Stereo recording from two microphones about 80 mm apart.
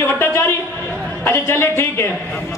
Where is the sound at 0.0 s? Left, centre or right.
Left.